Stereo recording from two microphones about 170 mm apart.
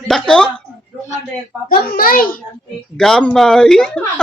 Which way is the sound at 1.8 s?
60° left (ahead or behind).